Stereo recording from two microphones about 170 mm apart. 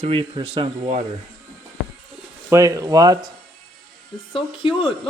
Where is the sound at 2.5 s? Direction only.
20° right (ahead or behind).